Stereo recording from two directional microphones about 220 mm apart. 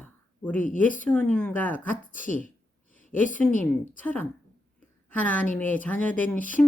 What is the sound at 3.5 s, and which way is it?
Speech, 35° left (ahead or behind).